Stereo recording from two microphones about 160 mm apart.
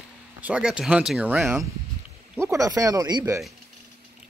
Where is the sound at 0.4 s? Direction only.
5° right (ahead or behind).